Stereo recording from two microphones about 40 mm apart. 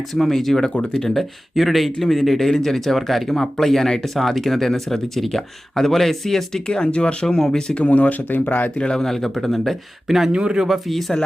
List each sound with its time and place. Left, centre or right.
0.1 s speech: centre
1.5 s speech: centre
6.8 s speech: left
7.3 s speech: centre
7.7 s speech: left
9.0 s speech: centre
10.1 s speech: centre
10.3 s speech: right
10.7 s speech: centre